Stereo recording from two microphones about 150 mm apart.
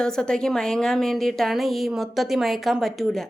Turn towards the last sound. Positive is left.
turn(degrees=0)  # may be behind; listen again after turning